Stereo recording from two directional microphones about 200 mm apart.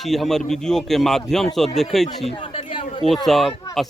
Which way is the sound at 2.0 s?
30° left (ahead or behind).